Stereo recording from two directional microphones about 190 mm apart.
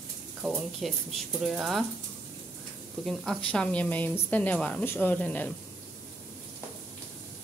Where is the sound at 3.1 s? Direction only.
5° left (ahead or behind).